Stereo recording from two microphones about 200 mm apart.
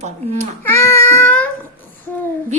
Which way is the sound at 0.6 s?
10° left (ahead or behind).